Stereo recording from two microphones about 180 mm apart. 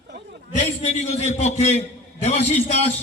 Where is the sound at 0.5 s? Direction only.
40° left (ahead or behind).